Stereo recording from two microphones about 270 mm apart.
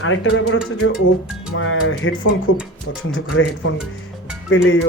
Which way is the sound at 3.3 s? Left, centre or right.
Left.